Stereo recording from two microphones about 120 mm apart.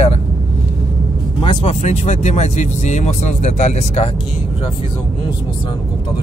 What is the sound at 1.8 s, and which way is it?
Speech, 70° left (ahead or behind).